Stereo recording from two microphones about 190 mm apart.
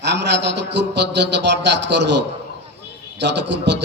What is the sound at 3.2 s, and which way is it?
Speech, 65° right (ahead or behind).